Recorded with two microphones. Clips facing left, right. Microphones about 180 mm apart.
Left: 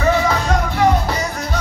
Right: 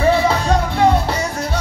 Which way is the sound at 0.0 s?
30° right (ahead or behind).